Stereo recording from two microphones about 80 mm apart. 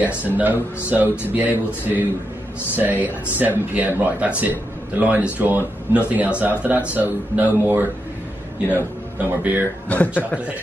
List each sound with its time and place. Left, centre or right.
0.3 s speech: right